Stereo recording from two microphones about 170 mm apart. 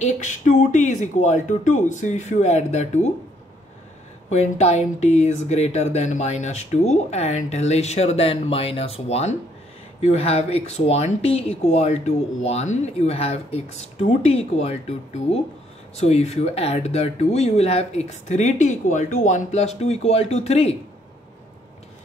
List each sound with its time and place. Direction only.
0.0 s speech: 45° left (ahead or behind)
4.3 s speech: 40° left (ahead or behind)
16.0 s speech: 40° left (ahead or behind)